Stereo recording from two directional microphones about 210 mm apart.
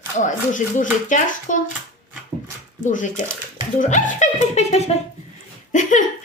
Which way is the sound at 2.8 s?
35° left (ahead or behind).